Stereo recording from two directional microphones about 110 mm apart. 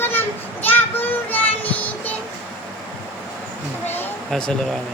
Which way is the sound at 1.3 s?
15° left (ahead or behind).